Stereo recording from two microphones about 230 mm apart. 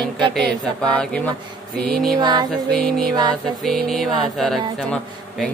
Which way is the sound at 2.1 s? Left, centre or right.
Centre.